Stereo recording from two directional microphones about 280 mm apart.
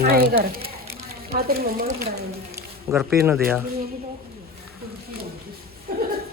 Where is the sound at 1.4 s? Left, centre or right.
Right.